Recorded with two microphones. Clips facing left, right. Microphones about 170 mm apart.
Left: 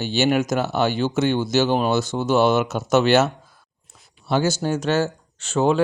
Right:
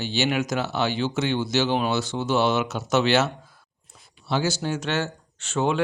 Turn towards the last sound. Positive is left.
turn(degrees=40)  # may be behind; listen again after turning